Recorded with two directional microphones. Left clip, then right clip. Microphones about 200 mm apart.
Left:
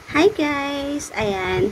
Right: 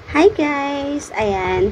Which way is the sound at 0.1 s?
15° left (ahead or behind).